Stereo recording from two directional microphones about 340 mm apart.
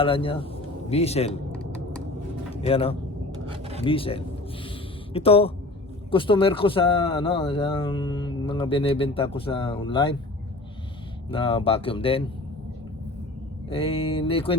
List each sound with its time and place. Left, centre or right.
0.0 s speech: centre
2.6 s speech: centre
3.5 s a sound: centre
3.8 s speech: centre
11.3 s speech: centre
13.7 s speech: centre